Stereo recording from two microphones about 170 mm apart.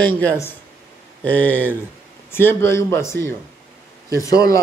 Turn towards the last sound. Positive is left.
turn(degrees=20)  # may be behind; listen again after turning